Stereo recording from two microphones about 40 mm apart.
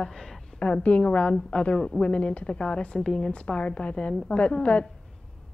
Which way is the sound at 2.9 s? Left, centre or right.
Centre.